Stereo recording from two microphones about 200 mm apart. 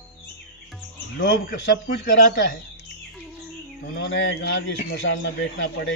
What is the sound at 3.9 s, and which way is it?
Speech, 65° left (ahead or behind).